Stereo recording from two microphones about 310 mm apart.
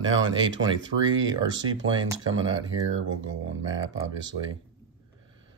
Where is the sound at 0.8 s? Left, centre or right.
Right.